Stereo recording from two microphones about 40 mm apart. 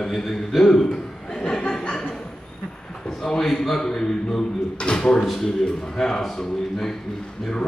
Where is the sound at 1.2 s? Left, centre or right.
Centre.